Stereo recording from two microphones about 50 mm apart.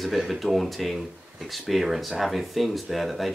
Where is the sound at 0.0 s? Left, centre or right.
Centre.